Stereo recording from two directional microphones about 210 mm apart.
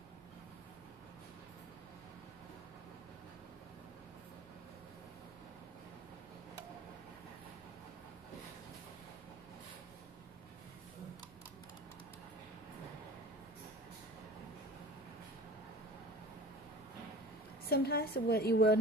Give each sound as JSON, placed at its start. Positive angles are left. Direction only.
{"t": 17.6, "sound": "a woman's voice", "side_deg": 50}